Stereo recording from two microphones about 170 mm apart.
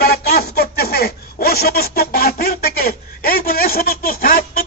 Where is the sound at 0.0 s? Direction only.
65° left (ahead or behind).